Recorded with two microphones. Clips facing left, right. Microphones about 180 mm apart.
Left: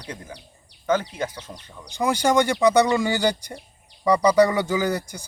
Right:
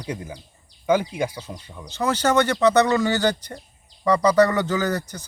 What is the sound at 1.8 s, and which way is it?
Speech, 15° left (ahead or behind).